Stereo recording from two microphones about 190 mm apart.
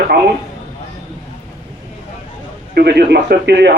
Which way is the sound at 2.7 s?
60° right (ahead or behind).